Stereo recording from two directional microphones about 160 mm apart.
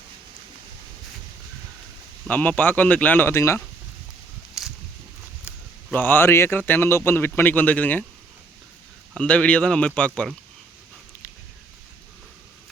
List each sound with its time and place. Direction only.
2.2 s speech: 10° left (ahead or behind)
4.6 s a sound: centre (ahead or behind)
5.9 s speech: 10° left (ahead or behind)
9.1 s speech: 5° left (ahead or behind)